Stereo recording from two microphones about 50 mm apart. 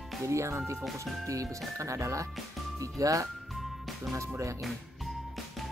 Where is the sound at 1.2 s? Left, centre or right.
Right.